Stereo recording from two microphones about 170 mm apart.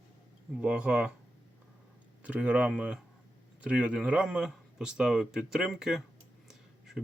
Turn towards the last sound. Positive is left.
turn(degrees=0)  # may be behind; listen again after turning